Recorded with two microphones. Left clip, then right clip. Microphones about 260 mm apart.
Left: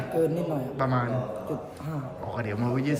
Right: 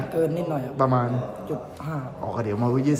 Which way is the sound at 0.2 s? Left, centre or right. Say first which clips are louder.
Right 2 dB; centre.